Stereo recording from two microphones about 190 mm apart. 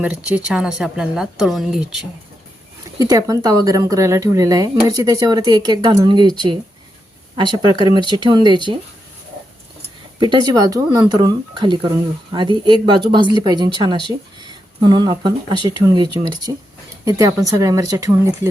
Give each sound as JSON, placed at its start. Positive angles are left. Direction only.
{"t": 0.0, "sound": "speech", "side_deg": -5}
{"t": 3.0, "sound": "speech", "side_deg": -20}
{"t": 10.2, "sound": "speech", "side_deg": -25}